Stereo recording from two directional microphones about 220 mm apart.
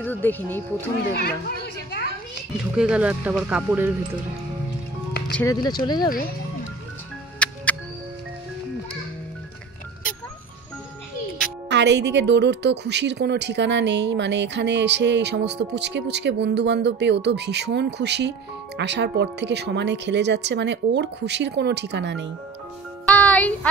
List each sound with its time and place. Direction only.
0.0 s speech: 10° left (ahead or behind)
1.1 s children playing: 45° left (ahead or behind)
2.7 s speech: 5° right (ahead or behind)
5.3 s speech: 15° left (ahead or behind)
7.4 s music: 5° left (ahead or behind)
11.7 s a woman's voice: 50° right (ahead or behind)
23.0 s music: 5° left (ahead or behind)